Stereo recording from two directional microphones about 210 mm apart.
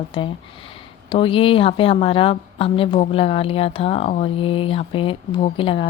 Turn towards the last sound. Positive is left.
turn(degrees=25)  # may be behind; listen again after turning